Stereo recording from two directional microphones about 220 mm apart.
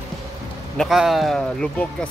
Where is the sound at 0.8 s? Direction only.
Centre (ahead or behind).